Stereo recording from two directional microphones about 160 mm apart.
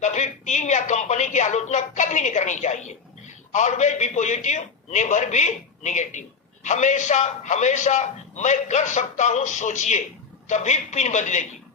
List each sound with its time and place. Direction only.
0.0 s a man's voice: 50° left (ahead or behind)